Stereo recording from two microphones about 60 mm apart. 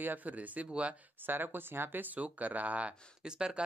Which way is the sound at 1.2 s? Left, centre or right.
Right.